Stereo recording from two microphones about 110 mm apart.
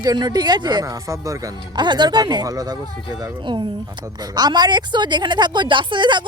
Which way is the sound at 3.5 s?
45° right (ahead or behind).